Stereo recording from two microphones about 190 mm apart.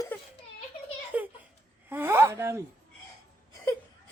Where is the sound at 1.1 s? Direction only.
10° right (ahead or behind).